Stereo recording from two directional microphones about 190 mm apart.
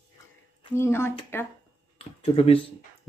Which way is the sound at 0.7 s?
15° left (ahead or behind).